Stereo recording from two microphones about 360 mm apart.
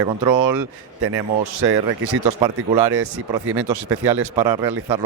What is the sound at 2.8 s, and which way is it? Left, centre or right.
Speech, right.